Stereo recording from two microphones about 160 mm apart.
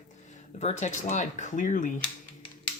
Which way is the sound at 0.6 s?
45° left (ahead or behind).